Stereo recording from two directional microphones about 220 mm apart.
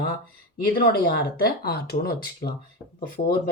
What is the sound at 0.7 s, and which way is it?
Speech, 45° left (ahead or behind).